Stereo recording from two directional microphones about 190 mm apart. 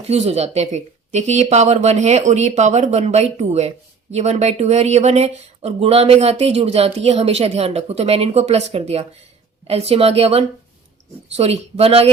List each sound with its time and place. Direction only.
0.1 s speech: 35° right (ahead or behind)